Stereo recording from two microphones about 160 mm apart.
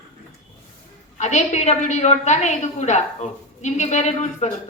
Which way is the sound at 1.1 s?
45° left (ahead or behind).